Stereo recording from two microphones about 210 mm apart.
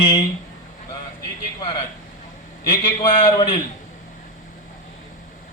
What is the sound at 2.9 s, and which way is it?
Speech, 25° left (ahead or behind).